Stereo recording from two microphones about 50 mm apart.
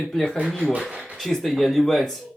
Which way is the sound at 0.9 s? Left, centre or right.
Right.